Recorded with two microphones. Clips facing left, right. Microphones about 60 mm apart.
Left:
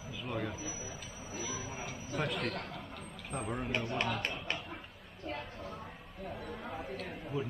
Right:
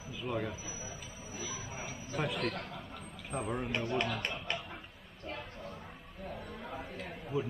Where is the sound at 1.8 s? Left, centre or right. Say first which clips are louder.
Right 1 dB; centre.